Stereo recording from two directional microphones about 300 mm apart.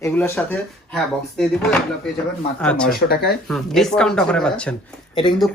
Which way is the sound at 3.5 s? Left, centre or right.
Centre.